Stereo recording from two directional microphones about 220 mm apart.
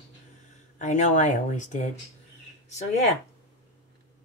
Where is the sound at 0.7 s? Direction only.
35° left (ahead or behind).